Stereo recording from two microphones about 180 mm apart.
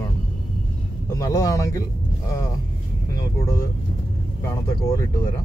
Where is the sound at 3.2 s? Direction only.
20° left (ahead or behind).